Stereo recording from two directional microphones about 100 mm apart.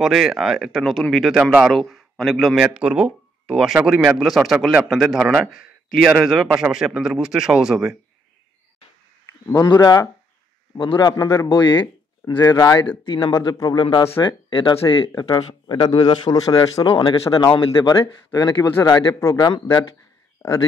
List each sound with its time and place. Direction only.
0.0 s speech: centre (ahead or behind)
9.5 s speech: 40° left (ahead or behind)
11.4 s speech: 55° left (ahead or behind)
12.4 s speech: 40° left (ahead or behind)
13.0 s speech: 50° left (ahead or behind)
13.3 s speech: 35° left (ahead or behind)
13.7 s speech: 50° left (ahead or behind)
15.1 s speech: 45° left (ahead or behind)
17.0 s speech: 60° left (ahead or behind)
18.3 s speech: 40° left (ahead or behind)
20.4 s speech: 35° left (ahead or behind)